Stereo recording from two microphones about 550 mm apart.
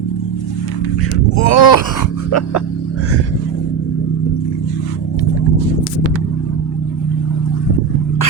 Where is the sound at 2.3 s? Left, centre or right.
Left.